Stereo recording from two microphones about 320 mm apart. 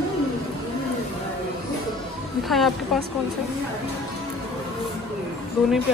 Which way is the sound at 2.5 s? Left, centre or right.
Centre.